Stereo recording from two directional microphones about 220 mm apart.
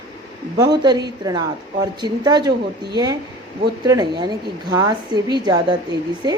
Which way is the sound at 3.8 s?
20° right (ahead or behind).